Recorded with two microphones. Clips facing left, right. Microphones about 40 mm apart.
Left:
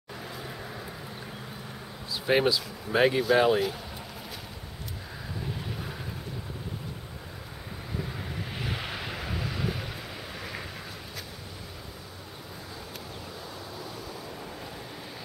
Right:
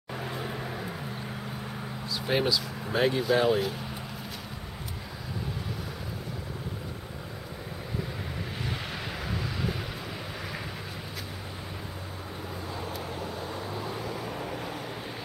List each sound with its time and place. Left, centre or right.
0.1 s vehicle: right
2.1 s speech: centre
8.7 s vehicle: centre
13.2 s vehicle: right
14.0 s vehicle: right